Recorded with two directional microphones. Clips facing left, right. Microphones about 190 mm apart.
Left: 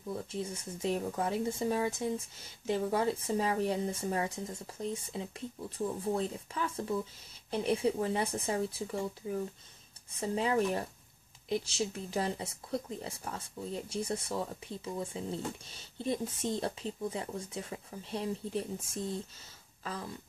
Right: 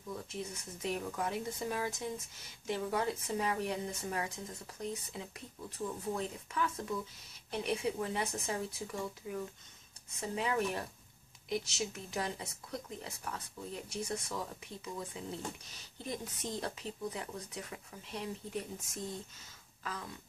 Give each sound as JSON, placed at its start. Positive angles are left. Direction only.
{"t": 0.1, "sound": "speech", "side_deg": 30}
{"t": 10.3, "sound": "speech", "side_deg": 30}
{"t": 19.8, "sound": "a sound", "side_deg": 30}